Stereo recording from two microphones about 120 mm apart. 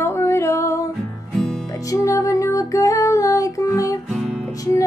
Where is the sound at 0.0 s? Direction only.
20° left (ahead or behind).